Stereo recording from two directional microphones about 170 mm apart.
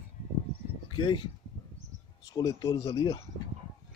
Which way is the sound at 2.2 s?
25° left (ahead or behind).